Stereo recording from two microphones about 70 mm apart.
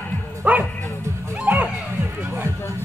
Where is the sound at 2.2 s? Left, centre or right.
Right.